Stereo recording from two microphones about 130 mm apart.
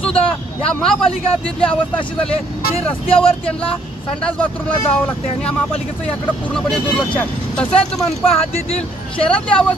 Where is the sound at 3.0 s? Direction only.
45° left (ahead or behind).